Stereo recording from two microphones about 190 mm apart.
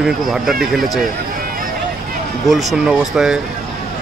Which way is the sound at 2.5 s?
Centre (ahead or behind).